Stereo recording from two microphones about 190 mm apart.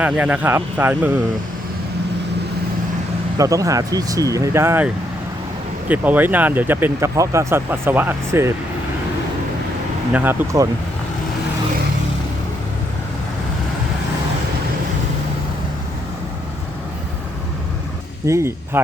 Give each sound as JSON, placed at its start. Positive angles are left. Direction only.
{"t": 0.0, "sound": "speech", "side_deg": -10}
{"t": 3.3, "sound": "speech", "side_deg": -15}
{"t": 5.9, "sound": "speech", "side_deg": -10}
{"t": 10.1, "sound": "speech", "side_deg": -10}
{"t": 18.3, "sound": "speech", "side_deg": -15}